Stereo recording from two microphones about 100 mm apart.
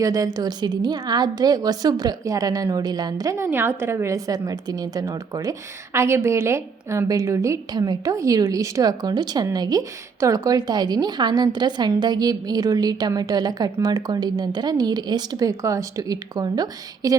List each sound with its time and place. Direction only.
0.0 s a woman's voice: 35° right (ahead or behind)